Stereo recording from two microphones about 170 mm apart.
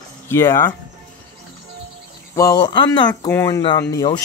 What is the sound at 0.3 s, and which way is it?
Speech, 15° left (ahead or behind).